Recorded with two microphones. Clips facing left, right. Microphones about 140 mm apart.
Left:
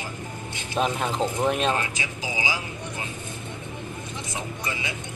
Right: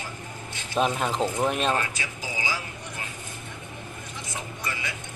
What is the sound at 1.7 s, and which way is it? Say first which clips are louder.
Speech: left 1 dB; 20° left (ahead or behind).